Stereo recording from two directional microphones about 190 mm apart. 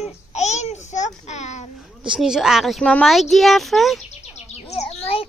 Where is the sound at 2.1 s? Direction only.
5° right (ahead or behind).